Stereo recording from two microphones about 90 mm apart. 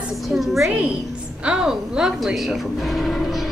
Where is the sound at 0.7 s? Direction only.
10° right (ahead or behind).